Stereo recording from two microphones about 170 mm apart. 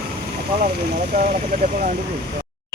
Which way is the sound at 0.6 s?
55° right (ahead or behind).